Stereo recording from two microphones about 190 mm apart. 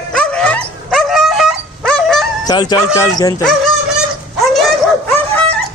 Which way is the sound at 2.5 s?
20° left (ahead or behind).